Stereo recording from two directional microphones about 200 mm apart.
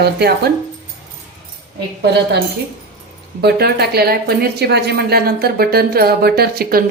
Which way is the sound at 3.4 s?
55° right (ahead or behind).